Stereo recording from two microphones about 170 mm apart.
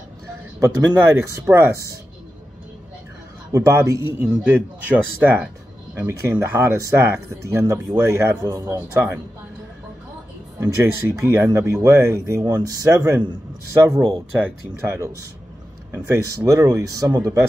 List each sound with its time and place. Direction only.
0.6 s speech: 15° right (ahead or behind)
3.5 s speech: 20° right (ahead or behind)
4.2 s speech: 10° right (ahead or behind)
10.6 s speech: 15° right (ahead or behind)
14.4 s speech: 15° right (ahead or behind)